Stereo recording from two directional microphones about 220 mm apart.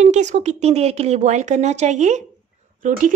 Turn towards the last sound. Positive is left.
turn(degrees=-35)  # may be behind; listen again after turning